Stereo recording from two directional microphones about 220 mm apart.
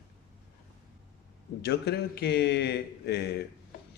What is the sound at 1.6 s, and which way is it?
A man's voice, 45° left (ahead or behind).